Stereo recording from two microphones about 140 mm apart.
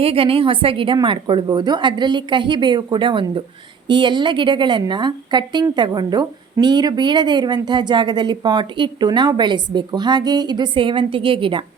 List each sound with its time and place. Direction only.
0.0 s speech: 40° right (ahead or behind)